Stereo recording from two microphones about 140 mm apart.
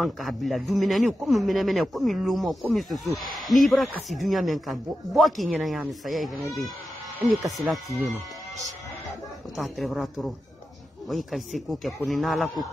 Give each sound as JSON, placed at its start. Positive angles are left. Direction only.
{"t": 0.0, "sound": "speech", "side_deg": 0}
{"t": 9.6, "sound": "speech", "side_deg": 0}